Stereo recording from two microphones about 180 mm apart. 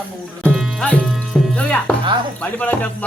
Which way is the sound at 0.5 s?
5° right (ahead or behind).